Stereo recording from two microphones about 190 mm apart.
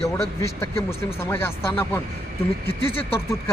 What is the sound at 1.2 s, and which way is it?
Speech, 15° left (ahead or behind).